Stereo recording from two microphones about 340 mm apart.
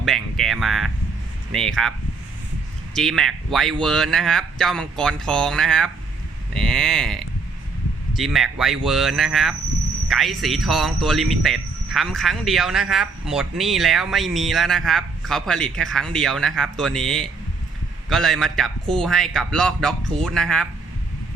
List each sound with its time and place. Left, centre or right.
0.0 s a sound: centre
1.5 s speech: centre
2.9 s speech: centre